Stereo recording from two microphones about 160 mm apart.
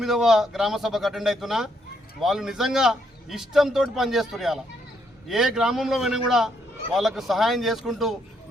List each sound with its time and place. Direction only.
0.0 s a man's voice: centre (ahead or behind)